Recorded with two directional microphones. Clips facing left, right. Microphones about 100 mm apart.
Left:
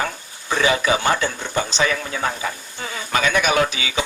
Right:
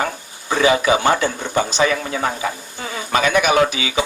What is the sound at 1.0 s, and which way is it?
A man's voice, 40° right (ahead or behind).